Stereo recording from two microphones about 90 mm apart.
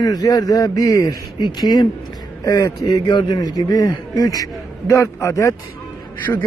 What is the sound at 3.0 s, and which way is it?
Speech, 55° left (ahead or behind).